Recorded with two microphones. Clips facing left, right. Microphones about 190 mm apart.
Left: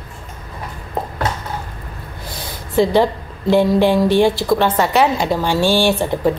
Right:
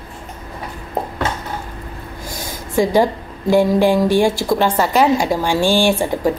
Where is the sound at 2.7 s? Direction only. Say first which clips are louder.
Left 1 dB; 10° right (ahead or behind).